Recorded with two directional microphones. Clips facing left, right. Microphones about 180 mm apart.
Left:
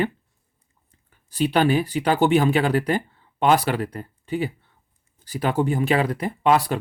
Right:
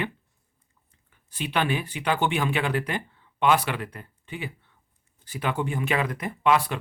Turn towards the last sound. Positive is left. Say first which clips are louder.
# left 3 dB
turn(degrees=35)  # may be behind; listen again after turning